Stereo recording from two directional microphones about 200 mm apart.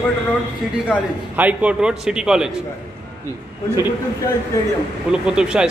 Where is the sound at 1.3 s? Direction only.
10° right (ahead or behind).